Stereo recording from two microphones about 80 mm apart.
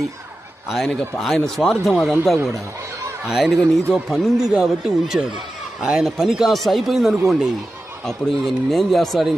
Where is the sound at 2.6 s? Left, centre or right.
Right.